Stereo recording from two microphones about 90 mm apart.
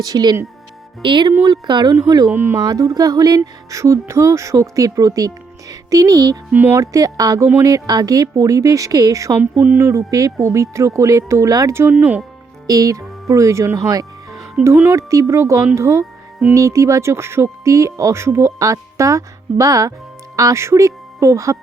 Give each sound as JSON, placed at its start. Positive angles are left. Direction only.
{"t": 0.0, "sound": "speech", "side_deg": -45}
{"t": 1.0, "sound": "speech", "side_deg": -60}
{"t": 2.3, "sound": "a sound", "side_deg": -25}
{"t": 2.7, "sound": "speech", "side_deg": -45}
{"t": 6.5, "sound": "a sound", "side_deg": -20}
{"t": 6.7, "sound": "speech", "side_deg": -40}
{"t": 9.4, "sound": "a sound", "side_deg": -20}
{"t": 10.3, "sound": "speech", "side_deg": -35}
{"t": 12.6, "sound": "speech", "side_deg": -40}